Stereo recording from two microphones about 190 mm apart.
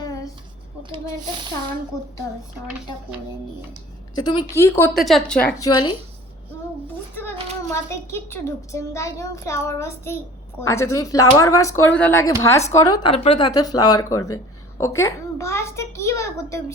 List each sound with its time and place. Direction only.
0.0 s a sound: 20° left (ahead or behind)
0.8 s a sound: 25° right (ahead or behind)
4.1 s a woman's voice: 25° left (ahead or behind)
4.9 s a woman's voice: centre (ahead or behind)
5.5 s a woman's voice: 20° left (ahead or behind)
7.9 s speech: 15° left (ahead or behind)